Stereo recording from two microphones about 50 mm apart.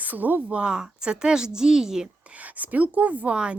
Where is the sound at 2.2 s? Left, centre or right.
Right.